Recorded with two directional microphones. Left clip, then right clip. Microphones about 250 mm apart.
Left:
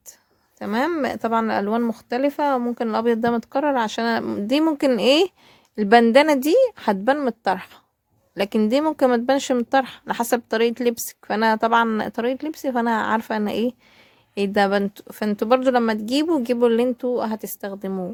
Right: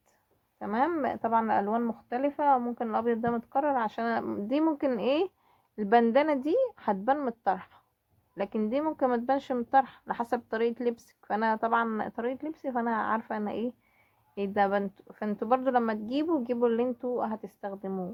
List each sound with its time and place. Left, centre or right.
0.6 s speech: left